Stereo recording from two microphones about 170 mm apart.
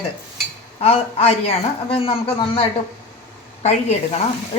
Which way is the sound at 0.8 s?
35° left (ahead or behind).